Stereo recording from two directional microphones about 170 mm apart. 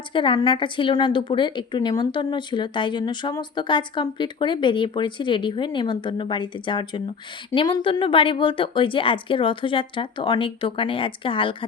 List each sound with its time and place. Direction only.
0.1 s a woman's voice: 30° left (ahead or behind)